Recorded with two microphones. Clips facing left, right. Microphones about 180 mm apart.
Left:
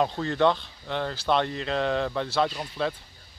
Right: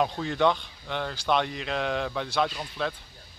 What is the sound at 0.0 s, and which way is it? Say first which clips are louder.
Speech: left 1 dB; 5° right (ahead or behind).